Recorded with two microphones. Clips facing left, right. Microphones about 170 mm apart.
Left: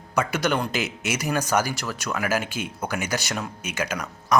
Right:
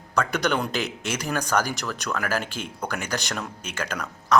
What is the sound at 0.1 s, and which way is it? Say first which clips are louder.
Speech: even; 5° left (ahead or behind).